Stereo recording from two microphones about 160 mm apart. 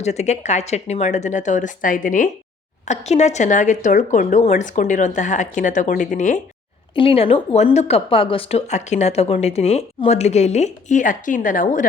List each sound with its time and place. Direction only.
0.0 s speech: 45° left (ahead or behind)
6.9 s speech: 35° left (ahead or behind); by 11.9 s 55° left (ahead or behind)